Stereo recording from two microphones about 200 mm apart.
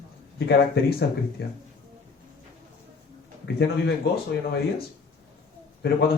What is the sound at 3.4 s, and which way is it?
Speech, 60° left (ahead or behind).